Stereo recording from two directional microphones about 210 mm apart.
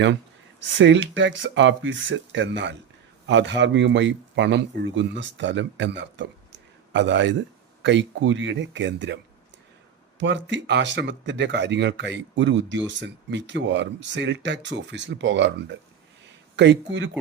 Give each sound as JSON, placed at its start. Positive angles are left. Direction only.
{"t": 0.8, "sound": "speech", "side_deg": -60}
{"t": 10.2, "sound": "speech", "side_deg": -60}